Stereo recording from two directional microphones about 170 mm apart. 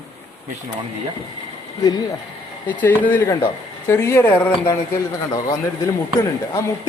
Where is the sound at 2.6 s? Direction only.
10° left (ahead or behind).